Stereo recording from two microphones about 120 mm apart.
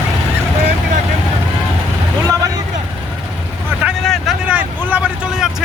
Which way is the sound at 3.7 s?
15° right (ahead or behind).